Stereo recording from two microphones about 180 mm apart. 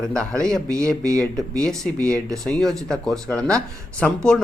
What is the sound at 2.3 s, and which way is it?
Speech, 5° left (ahead or behind).